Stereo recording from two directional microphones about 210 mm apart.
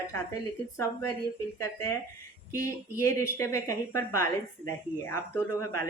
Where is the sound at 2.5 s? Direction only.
15° left (ahead or behind).